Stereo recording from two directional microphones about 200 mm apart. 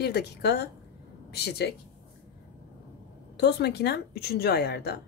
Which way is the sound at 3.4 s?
55° left (ahead or behind).